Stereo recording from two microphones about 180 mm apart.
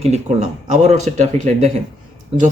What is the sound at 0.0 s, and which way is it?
Speech, 40° right (ahead or behind).